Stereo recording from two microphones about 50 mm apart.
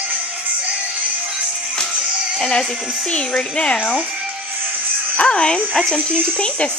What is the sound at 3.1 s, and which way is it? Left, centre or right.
Speech, centre.